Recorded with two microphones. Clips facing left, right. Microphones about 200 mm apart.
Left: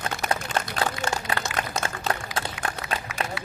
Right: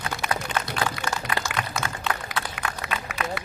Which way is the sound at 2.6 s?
35° left (ahead or behind).